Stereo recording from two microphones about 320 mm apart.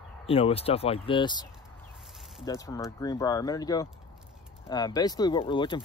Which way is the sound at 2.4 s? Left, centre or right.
Centre.